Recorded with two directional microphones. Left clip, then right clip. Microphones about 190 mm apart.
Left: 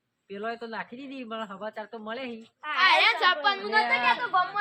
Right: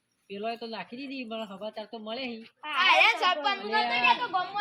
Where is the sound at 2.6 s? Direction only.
50° left (ahead or behind); by 3.7 s 25° left (ahead or behind).